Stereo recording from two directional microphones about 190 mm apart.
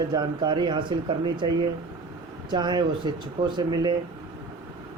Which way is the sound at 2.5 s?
25° right (ahead or behind).